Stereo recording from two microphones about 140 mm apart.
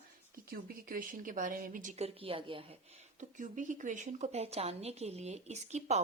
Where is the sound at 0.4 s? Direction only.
90° right.